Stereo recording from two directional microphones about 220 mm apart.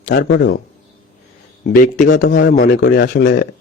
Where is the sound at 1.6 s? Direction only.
40° left (ahead or behind).